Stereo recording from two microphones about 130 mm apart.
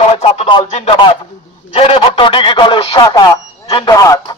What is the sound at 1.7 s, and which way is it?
A man's voice, 45° left (ahead or behind).